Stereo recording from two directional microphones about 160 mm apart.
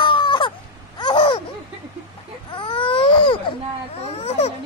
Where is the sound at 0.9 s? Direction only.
30° left (ahead or behind).